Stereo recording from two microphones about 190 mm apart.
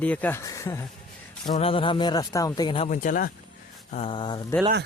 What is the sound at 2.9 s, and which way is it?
Speech, 45° left (ahead or behind).